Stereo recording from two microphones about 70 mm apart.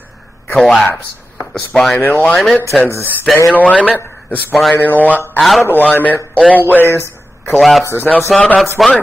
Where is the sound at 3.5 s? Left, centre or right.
Left.